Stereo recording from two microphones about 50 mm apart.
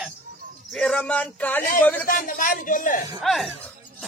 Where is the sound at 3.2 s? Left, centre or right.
Centre.